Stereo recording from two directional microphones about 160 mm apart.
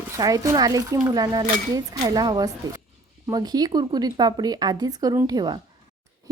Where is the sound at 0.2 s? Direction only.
20° right (ahead or behind).